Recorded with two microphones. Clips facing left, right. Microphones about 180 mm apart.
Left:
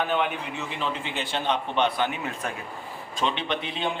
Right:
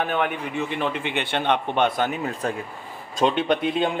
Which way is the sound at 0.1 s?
55° right (ahead or behind).